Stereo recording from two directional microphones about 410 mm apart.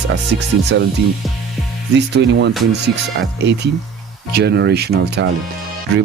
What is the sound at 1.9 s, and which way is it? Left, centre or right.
Speech, right.